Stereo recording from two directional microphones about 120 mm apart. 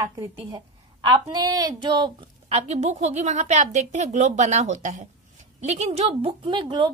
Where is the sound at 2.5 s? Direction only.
70° right (ahead or behind).